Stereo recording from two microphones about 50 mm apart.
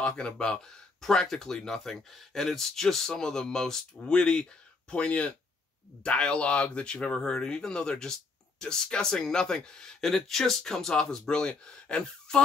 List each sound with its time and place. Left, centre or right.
0.0 s speech: centre